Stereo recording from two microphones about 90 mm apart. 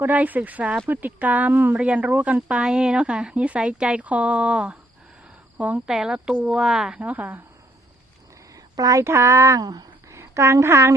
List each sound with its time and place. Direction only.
0.0 s speech: 20° right (ahead or behind)
7.0 s speech: 20° right (ahead or behind)
8.5 s speech: 40° right (ahead or behind)
10.1 s speech: 30° right (ahead or behind)